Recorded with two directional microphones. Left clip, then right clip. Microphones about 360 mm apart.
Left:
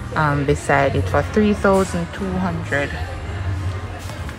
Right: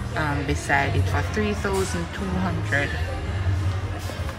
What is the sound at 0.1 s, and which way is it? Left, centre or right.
A woman's voice, centre.